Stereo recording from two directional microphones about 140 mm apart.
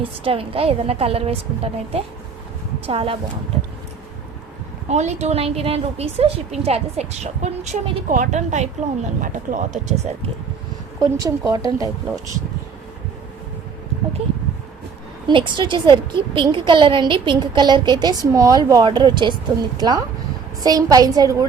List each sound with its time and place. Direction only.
0.0 s a woman's voice: 40° right (ahead or behind)
4.9 s a woman's voice: 55° right (ahead or behind)
11.0 s a woman's voice: 25° right (ahead or behind)
15.3 s a woman's voice: 35° right (ahead or behind)